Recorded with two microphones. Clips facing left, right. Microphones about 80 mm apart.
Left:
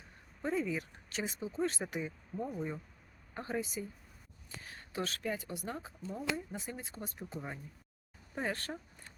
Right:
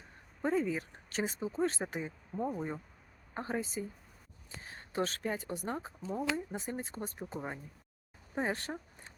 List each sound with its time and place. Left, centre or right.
0.4 s speech: right
8.4 s speech: right